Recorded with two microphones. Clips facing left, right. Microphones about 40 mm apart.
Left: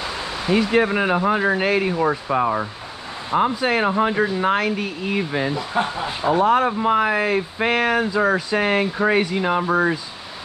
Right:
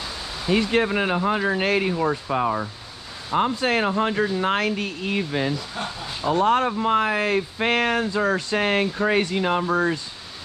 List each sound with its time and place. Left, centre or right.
0.5 s speech: centre
5.5 s speech: left
6.4 s speech: centre
9.7 s speech: centre